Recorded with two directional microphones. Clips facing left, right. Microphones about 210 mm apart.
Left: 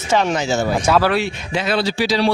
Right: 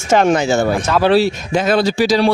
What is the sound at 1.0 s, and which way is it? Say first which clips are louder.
Speech: right 6 dB; 30° right (ahead or behind).